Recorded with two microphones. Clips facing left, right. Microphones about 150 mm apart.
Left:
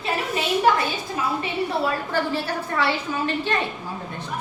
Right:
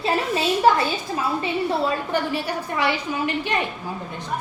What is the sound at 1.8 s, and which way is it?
A woman's voice, 15° right (ahead or behind).